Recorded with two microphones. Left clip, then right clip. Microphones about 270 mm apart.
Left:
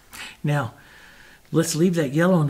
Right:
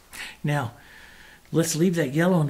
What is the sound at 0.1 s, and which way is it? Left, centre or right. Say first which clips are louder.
Speech: left 1 dB; left.